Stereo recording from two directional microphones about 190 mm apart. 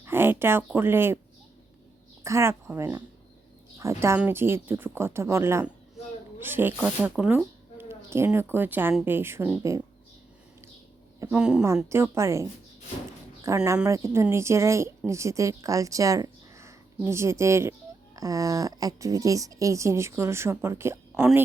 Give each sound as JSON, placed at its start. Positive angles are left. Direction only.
{"t": 0.0, "sound": "a woman's voice", "side_deg": -10}
{"t": 2.2, "sound": "a woman's voice", "side_deg": -15}
{"t": 11.2, "sound": "a woman's voice", "side_deg": -5}
{"t": 13.7, "sound": "a woman's voice", "side_deg": -15}